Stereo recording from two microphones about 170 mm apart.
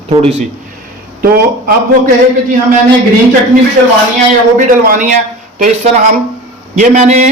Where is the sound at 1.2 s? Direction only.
60° right (ahead or behind).